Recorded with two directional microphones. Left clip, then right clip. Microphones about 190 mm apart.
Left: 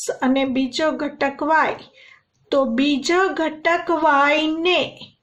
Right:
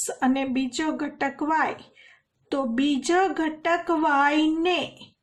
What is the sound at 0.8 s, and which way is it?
Speech, 40° right (ahead or behind).